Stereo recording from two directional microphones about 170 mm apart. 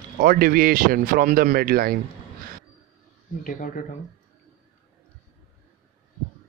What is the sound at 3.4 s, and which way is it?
Speech, 55° left (ahead or behind).